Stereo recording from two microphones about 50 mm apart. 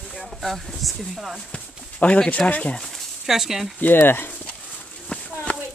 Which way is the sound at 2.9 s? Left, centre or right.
Centre.